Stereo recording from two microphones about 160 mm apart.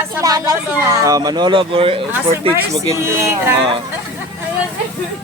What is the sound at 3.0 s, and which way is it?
Speech, 15° right (ahead or behind).